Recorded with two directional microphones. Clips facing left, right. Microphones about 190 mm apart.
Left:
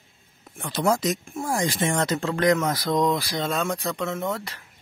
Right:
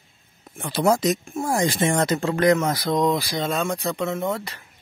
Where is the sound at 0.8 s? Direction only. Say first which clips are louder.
Right 3 dB; 15° right (ahead or behind).